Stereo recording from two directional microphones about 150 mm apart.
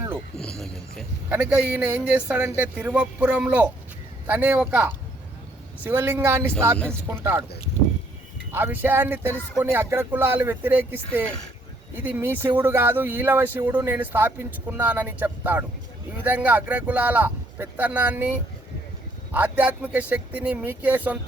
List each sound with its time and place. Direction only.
0.3 s a sound: 5° left (ahead or behind)
1.3 s speech: 10° right (ahead or behind)
8.5 s speech: 15° right (ahead or behind)